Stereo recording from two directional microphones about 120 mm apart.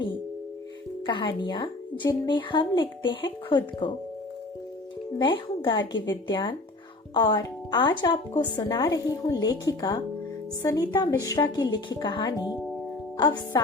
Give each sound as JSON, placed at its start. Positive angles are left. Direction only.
{"t": 1.0, "sound": "a woman's voice", "side_deg": 40}
{"t": 5.1, "sound": "speech", "side_deg": 40}
{"t": 13.1, "sound": "music", "side_deg": 35}